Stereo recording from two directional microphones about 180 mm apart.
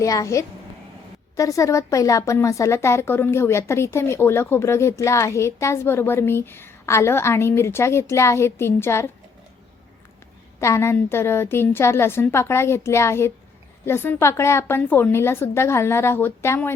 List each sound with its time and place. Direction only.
0.0 s a woman's voice: 15° left (ahead or behind)
10.6 s a woman's voice: 15° left (ahead or behind)